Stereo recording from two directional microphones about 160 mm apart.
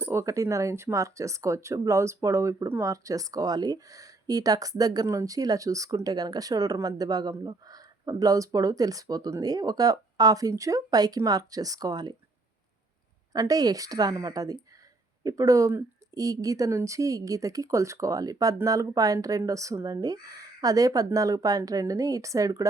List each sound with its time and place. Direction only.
0.1 s speech: 20° right (ahead or behind)
13.3 s speech: 20° right (ahead or behind)